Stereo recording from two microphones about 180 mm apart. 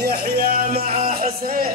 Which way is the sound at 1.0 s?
50° right (ahead or behind).